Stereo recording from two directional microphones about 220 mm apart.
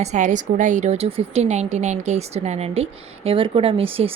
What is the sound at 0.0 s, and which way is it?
A woman's voice, 35° right (ahead or behind).